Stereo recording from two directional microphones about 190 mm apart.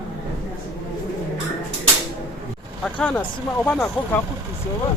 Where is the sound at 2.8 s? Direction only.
5° left (ahead or behind).